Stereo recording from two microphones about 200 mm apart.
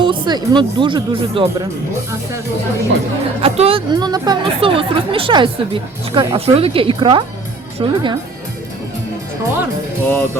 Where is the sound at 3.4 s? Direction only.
30° right (ahead or behind).